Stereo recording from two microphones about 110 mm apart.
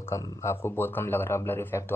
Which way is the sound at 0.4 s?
25° left (ahead or behind).